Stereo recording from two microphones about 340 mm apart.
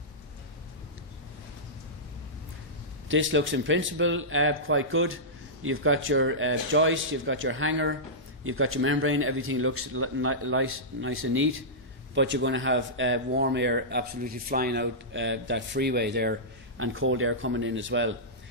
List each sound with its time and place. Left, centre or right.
3.1 s speech: right